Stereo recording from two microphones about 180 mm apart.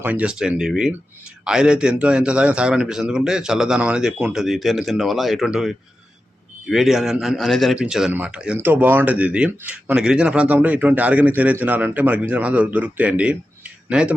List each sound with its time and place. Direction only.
0.0 s a man's voice: 10° right (ahead or behind)